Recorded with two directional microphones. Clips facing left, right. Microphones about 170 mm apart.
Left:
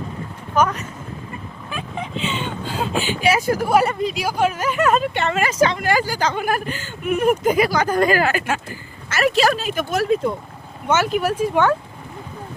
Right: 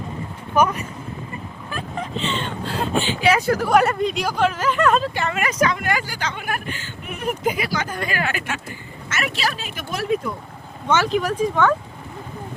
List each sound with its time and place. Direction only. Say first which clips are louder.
0.5 s speech: even; 10° right (ahead or behind)
1.7 s speech: even; 5° left (ahead or behind)
5.1 s speech: left 3 dB; 30° left (ahead or behind)
7.0 s speech: left 7 dB; 50° left (ahead or behind)
10.8 s speech: left 1 dB; 5° left (ahead or behind)